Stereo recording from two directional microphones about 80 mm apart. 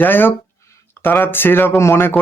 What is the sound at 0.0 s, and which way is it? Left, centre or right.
Speech, left.